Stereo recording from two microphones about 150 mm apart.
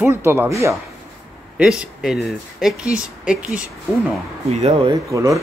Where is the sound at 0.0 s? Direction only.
15° right (ahead or behind).